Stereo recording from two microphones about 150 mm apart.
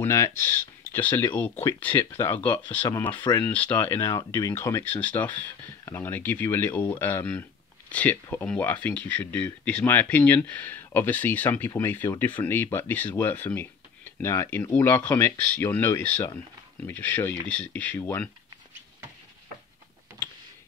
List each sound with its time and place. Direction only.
0.0 s speech: 20° left (ahead or behind)
3.2 s speech: 30° left (ahead or behind)
3.4 s speech: 10° left (ahead or behind)